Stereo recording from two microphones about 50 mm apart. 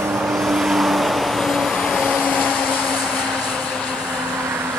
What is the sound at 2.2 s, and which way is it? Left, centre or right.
Vehicle, left.